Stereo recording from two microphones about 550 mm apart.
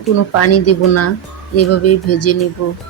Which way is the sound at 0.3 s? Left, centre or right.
Left.